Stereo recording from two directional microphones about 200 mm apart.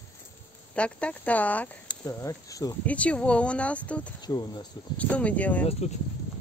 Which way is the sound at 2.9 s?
5° left (ahead or behind).